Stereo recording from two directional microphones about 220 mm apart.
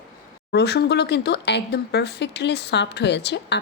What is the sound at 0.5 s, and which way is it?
Speech, 50° left (ahead or behind).